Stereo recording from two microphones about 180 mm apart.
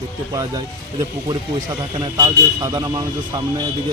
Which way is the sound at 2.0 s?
25° right (ahead or behind).